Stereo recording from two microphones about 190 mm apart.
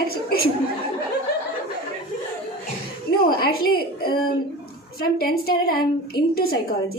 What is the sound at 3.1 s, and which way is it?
A woman's voice, 55° left (ahead or behind).